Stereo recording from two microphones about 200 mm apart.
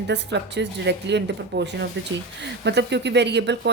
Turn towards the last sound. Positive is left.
turn(degrees=-60)  # may be behind; listen again after turning